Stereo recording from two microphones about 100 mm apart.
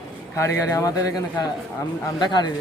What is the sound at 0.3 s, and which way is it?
Speech, 30° left (ahead or behind).